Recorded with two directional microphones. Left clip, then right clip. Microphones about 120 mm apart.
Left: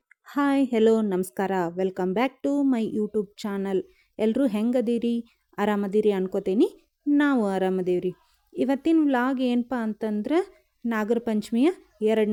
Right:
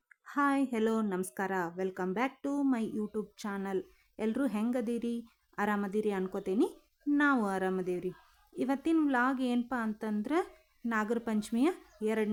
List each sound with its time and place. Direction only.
0.1 s a woman's voice: 50° left (ahead or behind)